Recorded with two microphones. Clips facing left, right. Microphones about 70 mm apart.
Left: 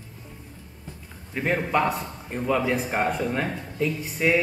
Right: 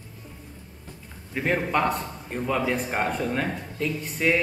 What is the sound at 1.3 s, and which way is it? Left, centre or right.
A man's voice, centre.